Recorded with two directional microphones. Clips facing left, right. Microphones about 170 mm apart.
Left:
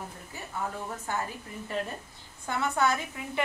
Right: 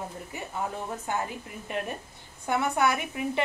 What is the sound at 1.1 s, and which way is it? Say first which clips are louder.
Speech: right 2 dB; 20° right (ahead or behind).